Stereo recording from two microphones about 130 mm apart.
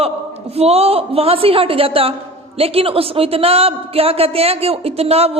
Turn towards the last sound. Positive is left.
turn(degrees=-50)  # may be behind; listen again after turning